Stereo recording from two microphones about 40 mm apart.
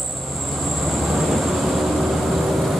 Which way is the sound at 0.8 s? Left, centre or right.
Centre.